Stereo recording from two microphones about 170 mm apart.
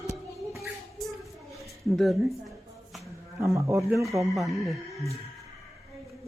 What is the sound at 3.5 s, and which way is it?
Speech, 15° right (ahead or behind).